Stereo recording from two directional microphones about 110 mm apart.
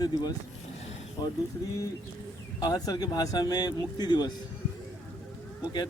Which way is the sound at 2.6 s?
40° left (ahead or behind).